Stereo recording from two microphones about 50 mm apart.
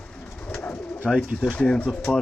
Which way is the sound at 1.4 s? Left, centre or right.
Left.